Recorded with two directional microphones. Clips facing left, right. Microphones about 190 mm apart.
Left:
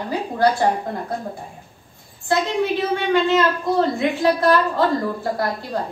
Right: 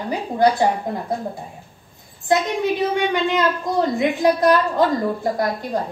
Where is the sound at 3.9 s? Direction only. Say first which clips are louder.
Right 1 dB; 20° right (ahead or behind).